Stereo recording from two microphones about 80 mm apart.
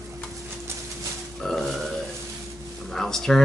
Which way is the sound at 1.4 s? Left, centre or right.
Centre.